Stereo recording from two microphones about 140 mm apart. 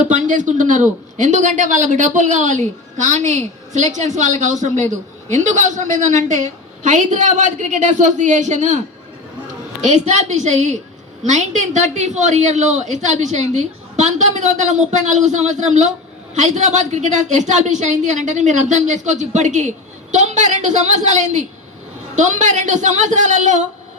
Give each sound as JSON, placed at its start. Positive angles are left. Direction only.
{"t": 0.0, "sound": "a woman's voice", "side_deg": -60}
{"t": 9.8, "sound": "a woman's voice", "side_deg": -55}